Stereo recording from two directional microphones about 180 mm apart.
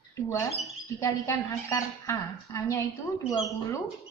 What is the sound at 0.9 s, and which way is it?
A woman's voice, 15° left (ahead or behind).